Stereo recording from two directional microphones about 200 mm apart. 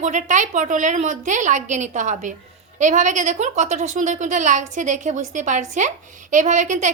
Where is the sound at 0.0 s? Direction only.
40° right (ahead or behind).